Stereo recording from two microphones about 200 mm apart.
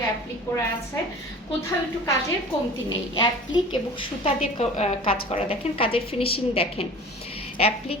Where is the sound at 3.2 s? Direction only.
25° left (ahead or behind).